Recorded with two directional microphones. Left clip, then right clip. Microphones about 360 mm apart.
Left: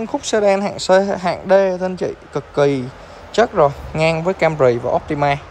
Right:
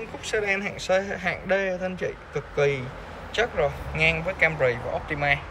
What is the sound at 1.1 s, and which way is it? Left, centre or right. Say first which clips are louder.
Speech: left 11 dB; centre.